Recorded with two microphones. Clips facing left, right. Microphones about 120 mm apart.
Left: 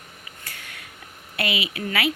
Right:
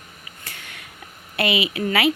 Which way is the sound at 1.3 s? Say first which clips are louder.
Right 5 dB; 20° right (ahead or behind).